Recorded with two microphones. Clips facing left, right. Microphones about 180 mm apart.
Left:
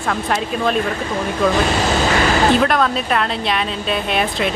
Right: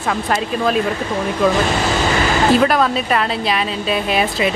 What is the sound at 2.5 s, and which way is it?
Speech, 5° right (ahead or behind).